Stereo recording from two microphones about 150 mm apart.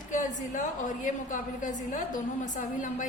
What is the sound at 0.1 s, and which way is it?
A woman's voice, 55° left (ahead or behind).